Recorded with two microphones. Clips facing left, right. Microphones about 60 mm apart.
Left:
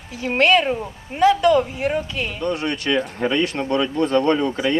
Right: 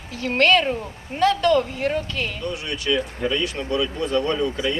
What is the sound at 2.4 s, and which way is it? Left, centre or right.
Speech, left.